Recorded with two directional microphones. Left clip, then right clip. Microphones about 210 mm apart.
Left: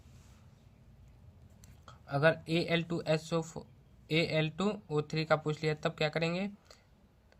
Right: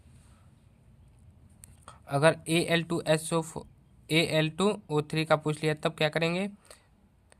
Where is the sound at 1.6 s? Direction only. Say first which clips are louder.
Right 5 dB; 35° right (ahead or behind).